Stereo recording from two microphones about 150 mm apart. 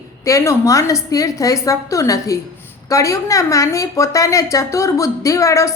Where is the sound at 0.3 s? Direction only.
20° left (ahead or behind).